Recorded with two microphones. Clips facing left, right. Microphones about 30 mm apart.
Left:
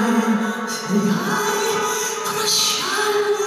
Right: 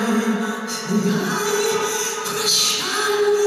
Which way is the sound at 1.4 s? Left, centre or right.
Centre.